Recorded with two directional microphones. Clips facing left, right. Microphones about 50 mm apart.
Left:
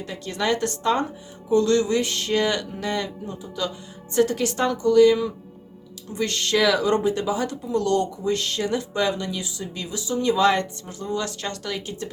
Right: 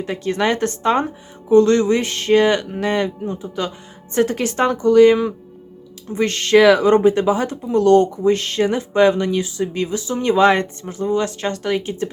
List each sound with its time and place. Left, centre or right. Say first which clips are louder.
0.0 s speech: right 7 dB; right